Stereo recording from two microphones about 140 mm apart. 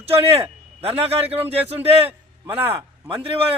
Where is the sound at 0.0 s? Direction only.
45° right (ahead or behind).